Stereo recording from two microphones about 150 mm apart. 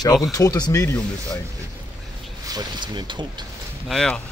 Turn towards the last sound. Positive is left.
turn(degrees=5)  # may be behind; listen again after turning